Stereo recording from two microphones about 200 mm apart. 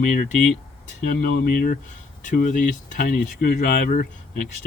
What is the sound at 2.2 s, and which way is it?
Speech, 40° left (ahead or behind).